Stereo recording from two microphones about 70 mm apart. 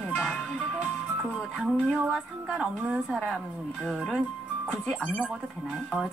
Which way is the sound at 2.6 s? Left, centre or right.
Centre.